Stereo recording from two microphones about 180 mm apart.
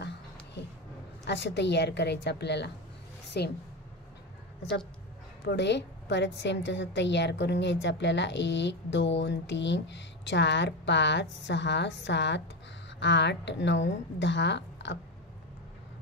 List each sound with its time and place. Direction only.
1.2 s a woman's voice: 70° left (ahead or behind)
3.3 s a sound: 65° left (ahead or behind)
5.4 s a woman's voice: 70° left (ahead or behind)